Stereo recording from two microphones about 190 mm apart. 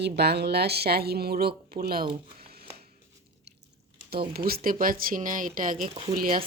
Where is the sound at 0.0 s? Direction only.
60° right (ahead or behind).